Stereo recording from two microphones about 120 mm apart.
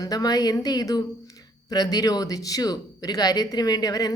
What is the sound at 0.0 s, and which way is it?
Speech, 30° left (ahead or behind).